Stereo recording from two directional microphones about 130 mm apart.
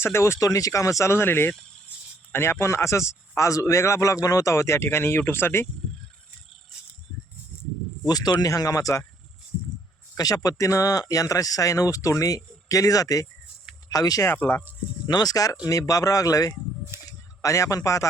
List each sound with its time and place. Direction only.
0.0 s a man's voice: 20° left (ahead or behind)
8.0 s a man's voice: 30° left (ahead or behind)
10.2 s a man's voice: 25° left (ahead or behind)
14.3 s speech: 15° left (ahead or behind)
15.0 s a man's voice: 30° left (ahead or behind)